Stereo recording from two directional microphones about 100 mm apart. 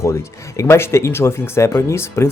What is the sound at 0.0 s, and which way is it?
Speech, 30° left (ahead or behind).